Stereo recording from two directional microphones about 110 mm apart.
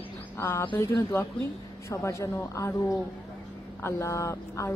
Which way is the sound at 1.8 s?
25° left (ahead or behind).